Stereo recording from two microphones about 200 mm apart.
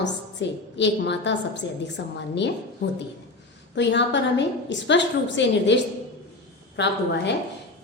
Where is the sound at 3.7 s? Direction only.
60° left (ahead or behind).